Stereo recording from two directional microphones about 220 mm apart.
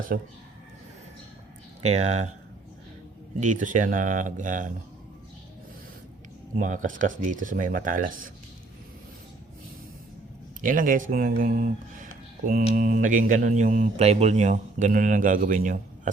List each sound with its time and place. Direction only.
0.1 s speech: 40° right (ahead or behind)
1.8 s speech: 30° right (ahead or behind)
3.4 s speech: 35° right (ahead or behind)
6.6 s speech: 35° right (ahead or behind)
10.6 s speech: 40° right (ahead or behind)